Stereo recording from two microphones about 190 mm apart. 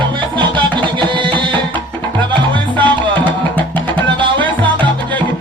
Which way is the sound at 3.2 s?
10° left (ahead or behind).